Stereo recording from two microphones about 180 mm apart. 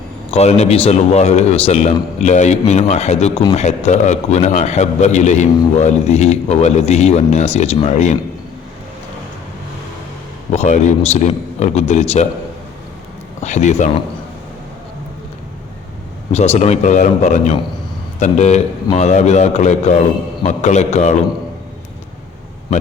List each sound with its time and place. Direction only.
0.3 s a man's voice: 35° left (ahead or behind)
10.5 s a man's voice: 40° left (ahead or behind)
13.4 s a man's voice: 40° left (ahead or behind)
16.3 s a man's voice: 35° left (ahead or behind)